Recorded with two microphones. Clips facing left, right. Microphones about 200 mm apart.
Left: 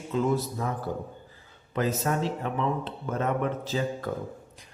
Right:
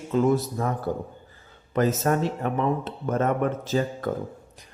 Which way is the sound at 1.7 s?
45° right (ahead or behind).